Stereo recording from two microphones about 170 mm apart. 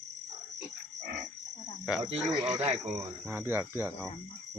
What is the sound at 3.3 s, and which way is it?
Speech, 15° right (ahead or behind).